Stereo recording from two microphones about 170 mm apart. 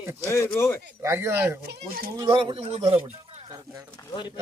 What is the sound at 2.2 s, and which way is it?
Speech, 30° right (ahead or behind).